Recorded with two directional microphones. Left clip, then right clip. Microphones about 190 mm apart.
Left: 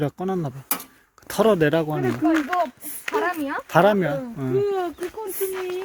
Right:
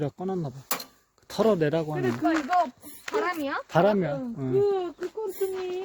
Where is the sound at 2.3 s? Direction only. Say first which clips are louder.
Left 5 dB; 10° right (ahead or behind).